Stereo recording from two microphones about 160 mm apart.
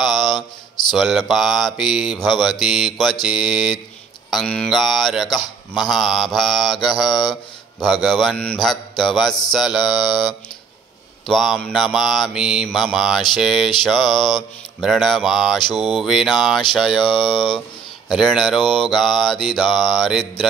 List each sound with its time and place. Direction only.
0.0 s mantra: centre (ahead or behind)
0.3 s mantra: 25° left (ahead or behind)
0.9 s mantra: centre (ahead or behind)
11.2 s mantra: centre (ahead or behind)